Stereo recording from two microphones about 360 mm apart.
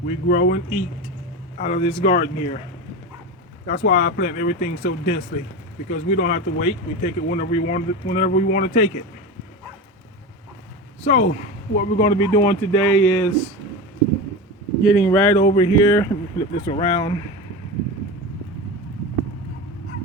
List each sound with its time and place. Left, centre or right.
0.0 s speech: left
3.7 s speech: left
11.0 s speech: centre
14.8 s speech: centre